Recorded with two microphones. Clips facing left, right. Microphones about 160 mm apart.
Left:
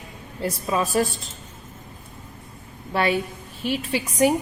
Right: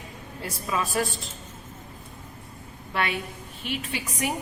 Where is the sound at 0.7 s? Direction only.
40° left (ahead or behind).